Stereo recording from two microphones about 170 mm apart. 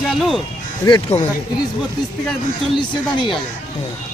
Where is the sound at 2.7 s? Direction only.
30° left (ahead or behind).